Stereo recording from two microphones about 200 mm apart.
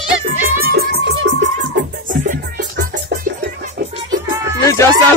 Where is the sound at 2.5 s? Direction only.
45° right (ahead or behind).